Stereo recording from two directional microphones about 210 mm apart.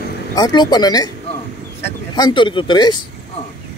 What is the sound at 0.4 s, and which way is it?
Speech, 20° left (ahead or behind).